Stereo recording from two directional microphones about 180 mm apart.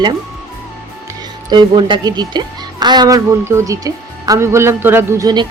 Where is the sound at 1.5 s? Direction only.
25° right (ahead or behind).